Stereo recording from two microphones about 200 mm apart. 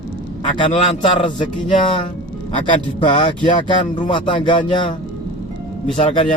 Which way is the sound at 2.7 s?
25° left (ahead or behind).